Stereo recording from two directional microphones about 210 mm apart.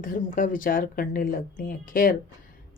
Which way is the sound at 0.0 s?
40° left (ahead or behind).